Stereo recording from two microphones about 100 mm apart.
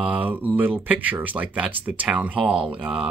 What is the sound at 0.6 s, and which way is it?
Speech, 20° right (ahead or behind).